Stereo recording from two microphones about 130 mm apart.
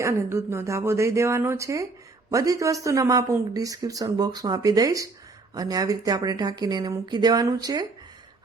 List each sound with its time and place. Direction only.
0.0 s speech: 20° right (ahead or behind)